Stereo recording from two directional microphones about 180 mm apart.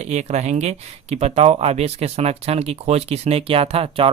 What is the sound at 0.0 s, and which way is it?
Speech, 40° right (ahead or behind).